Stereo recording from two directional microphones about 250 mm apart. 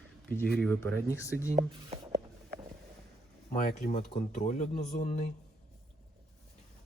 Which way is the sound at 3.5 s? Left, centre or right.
Left.